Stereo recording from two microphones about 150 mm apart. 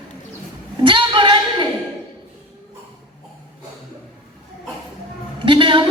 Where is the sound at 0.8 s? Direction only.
35° right (ahead or behind).